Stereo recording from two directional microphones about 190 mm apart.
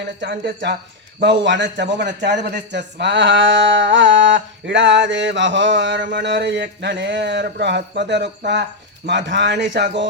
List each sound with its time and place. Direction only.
0.2 s a man's voice: 65° right (ahead or behind)